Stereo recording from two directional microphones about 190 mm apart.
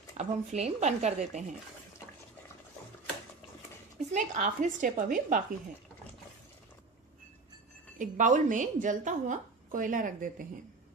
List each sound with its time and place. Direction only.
0.2 s speech: 35° right (ahead or behind)
4.1 s a woman's voice: 40° right (ahead or behind)
8.0 s a woman's voice: 45° right (ahead or behind)